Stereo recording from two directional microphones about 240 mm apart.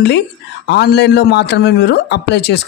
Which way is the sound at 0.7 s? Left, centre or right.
Left.